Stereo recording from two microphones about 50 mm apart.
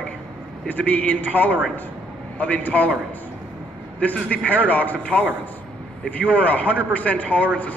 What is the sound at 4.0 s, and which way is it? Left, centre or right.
A man's voice, left.